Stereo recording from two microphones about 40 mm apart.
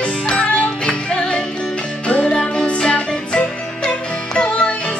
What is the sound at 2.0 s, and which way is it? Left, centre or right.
Music, left.